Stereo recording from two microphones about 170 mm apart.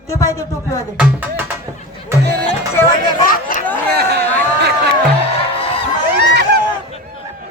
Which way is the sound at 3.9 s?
70° right (ahead or behind).